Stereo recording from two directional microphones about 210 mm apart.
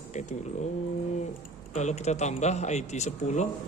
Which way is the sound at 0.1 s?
35° left (ahead or behind).